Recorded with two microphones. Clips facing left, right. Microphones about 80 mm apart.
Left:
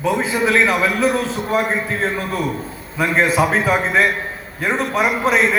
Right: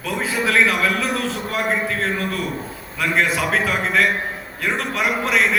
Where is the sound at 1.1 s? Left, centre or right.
Left.